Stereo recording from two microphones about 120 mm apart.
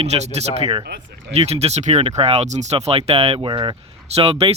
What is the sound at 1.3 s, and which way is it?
Speech, 60° right (ahead or behind).